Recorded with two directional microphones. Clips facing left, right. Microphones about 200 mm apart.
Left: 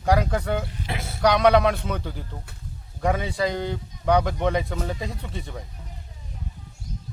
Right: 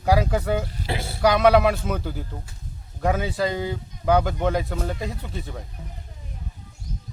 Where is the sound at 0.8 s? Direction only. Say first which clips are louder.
Right 3 dB; 30° right (ahead or behind).